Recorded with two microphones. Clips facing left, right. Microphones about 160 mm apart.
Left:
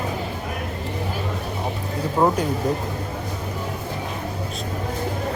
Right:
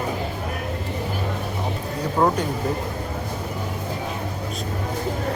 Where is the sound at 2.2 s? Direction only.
10° left (ahead or behind).